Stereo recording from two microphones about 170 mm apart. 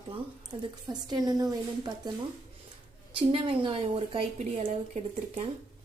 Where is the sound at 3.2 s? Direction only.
30° right (ahead or behind).